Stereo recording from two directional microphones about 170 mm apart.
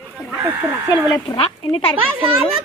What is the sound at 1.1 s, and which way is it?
Speech, 30° left (ahead or behind).